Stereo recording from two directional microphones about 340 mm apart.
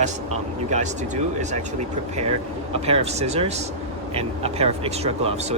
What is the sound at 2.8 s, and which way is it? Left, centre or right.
Speech, centre.